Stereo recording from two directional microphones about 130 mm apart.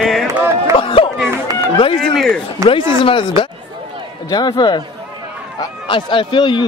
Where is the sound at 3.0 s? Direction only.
40° left (ahead or behind).